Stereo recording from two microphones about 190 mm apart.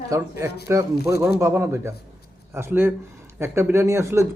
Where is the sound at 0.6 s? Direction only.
15° right (ahead or behind).